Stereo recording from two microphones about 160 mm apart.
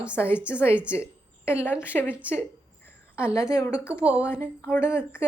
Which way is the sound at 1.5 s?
15° left (ahead or behind).